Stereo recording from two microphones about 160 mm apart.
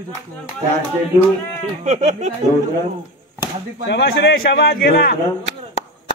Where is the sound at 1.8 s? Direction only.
45° right (ahead or behind).